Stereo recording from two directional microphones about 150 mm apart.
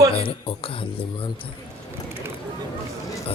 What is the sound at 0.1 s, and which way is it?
Speech, 35° left (ahead or behind).